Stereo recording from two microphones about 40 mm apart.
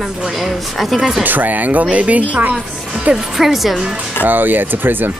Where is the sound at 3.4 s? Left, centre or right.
Centre.